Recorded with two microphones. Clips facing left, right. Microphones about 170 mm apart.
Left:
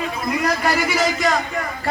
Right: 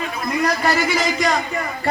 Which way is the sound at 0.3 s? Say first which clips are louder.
Right 1 dB; 5° left (ahead or behind).